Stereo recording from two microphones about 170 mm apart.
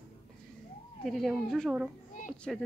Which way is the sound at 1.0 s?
Centre (ahead or behind).